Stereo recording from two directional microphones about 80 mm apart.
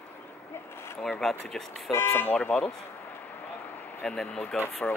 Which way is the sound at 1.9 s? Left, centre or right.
Left.